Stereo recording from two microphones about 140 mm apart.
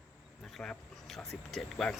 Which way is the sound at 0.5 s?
Centre (ahead or behind).